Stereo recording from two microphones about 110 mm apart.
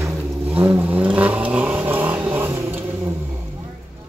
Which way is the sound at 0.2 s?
20° right (ahead or behind).